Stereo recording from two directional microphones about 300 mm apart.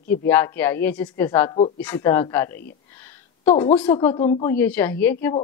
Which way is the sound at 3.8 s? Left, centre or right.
Centre.